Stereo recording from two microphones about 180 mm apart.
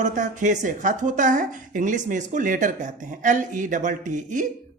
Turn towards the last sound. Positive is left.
turn(degrees=-45)  # may be behind; listen again after turning